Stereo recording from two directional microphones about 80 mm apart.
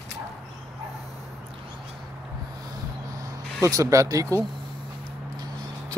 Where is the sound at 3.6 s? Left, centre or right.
Right.